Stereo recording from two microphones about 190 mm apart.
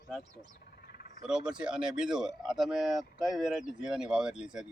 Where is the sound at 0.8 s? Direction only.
55° left (ahead or behind).